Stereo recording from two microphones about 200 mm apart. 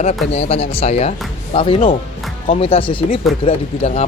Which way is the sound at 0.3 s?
30° left (ahead or behind).